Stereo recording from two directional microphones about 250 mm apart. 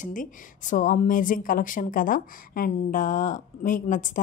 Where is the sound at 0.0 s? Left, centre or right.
Left.